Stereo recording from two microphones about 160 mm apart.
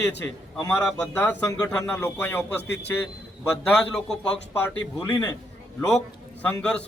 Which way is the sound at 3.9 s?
5° left (ahead or behind).